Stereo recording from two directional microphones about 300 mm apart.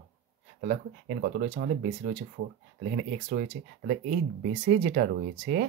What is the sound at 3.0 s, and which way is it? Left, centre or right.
Speech, right.